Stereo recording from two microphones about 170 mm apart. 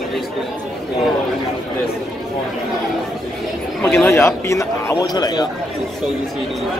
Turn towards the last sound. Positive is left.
turn(degrees=25)  # may be behind; listen again after turning